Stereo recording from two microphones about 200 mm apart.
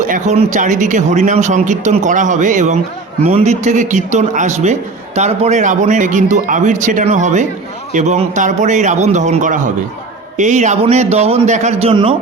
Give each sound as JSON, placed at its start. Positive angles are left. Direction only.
{"t": 0.0, "sound": "a man's voice", "side_deg": -35}